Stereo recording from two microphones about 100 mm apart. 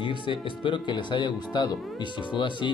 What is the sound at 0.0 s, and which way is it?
Speech, 55° left (ahead or behind).